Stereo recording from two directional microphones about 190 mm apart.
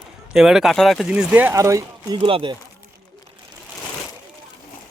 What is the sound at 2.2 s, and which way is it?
Speech, 30° right (ahead or behind).